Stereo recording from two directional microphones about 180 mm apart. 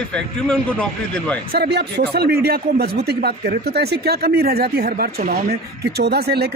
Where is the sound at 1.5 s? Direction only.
65° right (ahead or behind).